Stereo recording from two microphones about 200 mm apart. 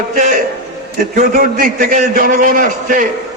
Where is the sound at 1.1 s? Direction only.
45° right (ahead or behind).